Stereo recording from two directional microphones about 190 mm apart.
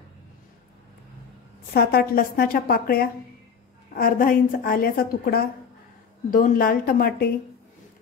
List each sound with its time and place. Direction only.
1.7 s a woman's voice: 55° left (ahead or behind)